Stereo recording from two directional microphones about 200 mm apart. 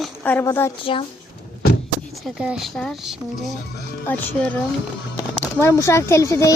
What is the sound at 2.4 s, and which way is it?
A child's voice, 5° right (ahead or behind).